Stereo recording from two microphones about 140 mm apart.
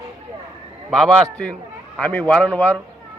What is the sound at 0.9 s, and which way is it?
A man's voice, 5° left (ahead or behind).